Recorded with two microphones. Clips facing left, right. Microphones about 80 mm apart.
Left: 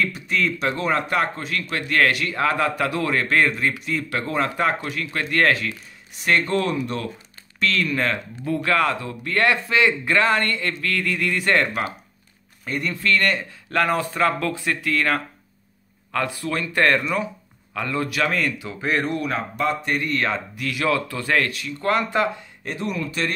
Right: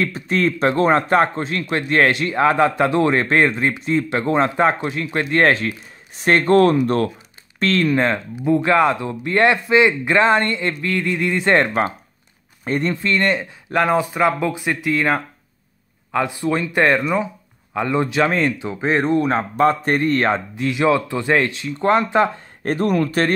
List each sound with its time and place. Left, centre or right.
0.0 s a man's voice: right
7.5 s a man's voice: right
22.7 s speech: right